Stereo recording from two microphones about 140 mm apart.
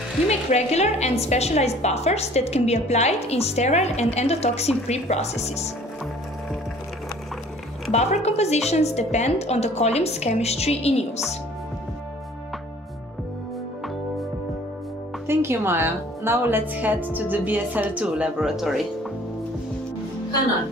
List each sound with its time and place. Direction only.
0.3 s a woman's voice: 50° left (ahead or behind)
7.9 s a woman's voice: 50° left (ahead or behind)
15.2 s a woman's voice: 15° right (ahead or behind)